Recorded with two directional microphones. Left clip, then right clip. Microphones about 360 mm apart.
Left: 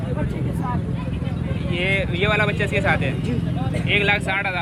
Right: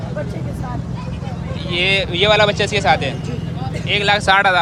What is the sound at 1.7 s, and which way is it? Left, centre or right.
Speech, centre.